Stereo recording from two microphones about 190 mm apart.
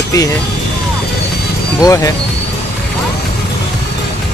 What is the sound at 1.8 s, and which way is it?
Speech, 20° left (ahead or behind).